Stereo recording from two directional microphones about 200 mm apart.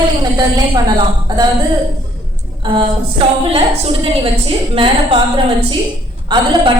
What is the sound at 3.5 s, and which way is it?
A woman's voice, 25° right (ahead or behind).